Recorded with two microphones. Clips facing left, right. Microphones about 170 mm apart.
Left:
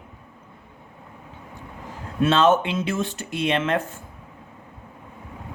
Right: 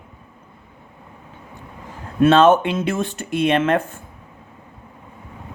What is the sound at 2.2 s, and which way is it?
Speech, 55° right (ahead or behind).